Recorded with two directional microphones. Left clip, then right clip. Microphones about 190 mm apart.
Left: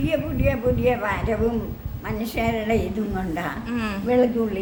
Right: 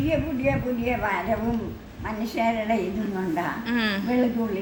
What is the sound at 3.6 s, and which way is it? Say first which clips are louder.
Speech: right 3 dB; centre (ahead or behind).